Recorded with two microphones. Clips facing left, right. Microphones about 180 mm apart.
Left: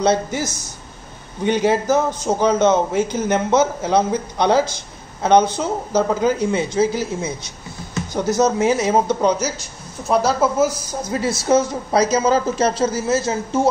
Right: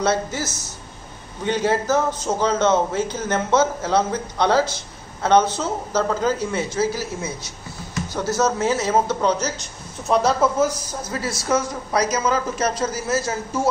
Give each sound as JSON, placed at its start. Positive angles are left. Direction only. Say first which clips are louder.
{"t": 0.0, "sound": "a man's voice", "louder": "left 3 dB", "side_deg": 15}
{"t": 10.0, "sound": "a woman's voice", "louder": "left 1 dB", "side_deg": 0}
{"t": 11.1, "sound": "a woman's voice", "louder": "left 5 dB", "side_deg": 20}